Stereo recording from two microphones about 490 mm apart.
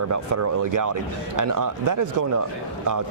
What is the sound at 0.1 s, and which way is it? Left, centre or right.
A man's voice, right.